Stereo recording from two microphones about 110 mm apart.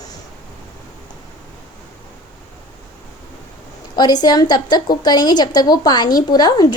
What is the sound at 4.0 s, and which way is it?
A woman's voice, 40° left (ahead or behind).